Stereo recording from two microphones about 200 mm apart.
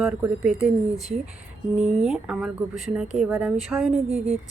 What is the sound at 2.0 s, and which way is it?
Speech, centre (ahead or behind).